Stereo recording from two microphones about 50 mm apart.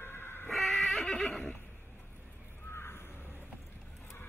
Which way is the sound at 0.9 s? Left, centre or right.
Centre.